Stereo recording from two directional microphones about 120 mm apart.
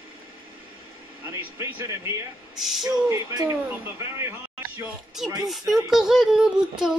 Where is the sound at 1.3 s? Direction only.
20° right (ahead or behind).